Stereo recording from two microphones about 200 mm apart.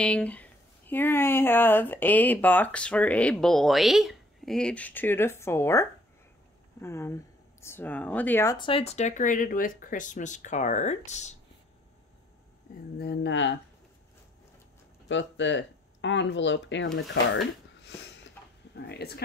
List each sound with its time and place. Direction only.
0.0 s speech: 5° left (ahead or behind)
8.5 s speech: 25° left (ahead or behind)
12.9 s speech: 55° left (ahead or behind)
15.0 s speech: 65° left (ahead or behind)
18.9 s speech: 55° left (ahead or behind)